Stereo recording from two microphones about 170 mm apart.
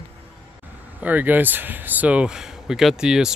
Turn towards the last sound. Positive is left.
turn(degrees=-5)  # may be behind; listen again after turning